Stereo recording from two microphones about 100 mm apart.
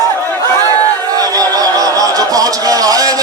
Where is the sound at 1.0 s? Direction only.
40° right (ahead or behind).